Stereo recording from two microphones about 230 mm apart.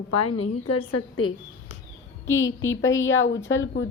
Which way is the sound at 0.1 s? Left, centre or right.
Left.